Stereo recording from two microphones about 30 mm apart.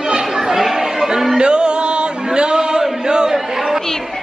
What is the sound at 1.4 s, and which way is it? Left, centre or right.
Chant, right.